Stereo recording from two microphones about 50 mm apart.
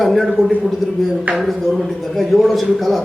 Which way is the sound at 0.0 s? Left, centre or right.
Centre.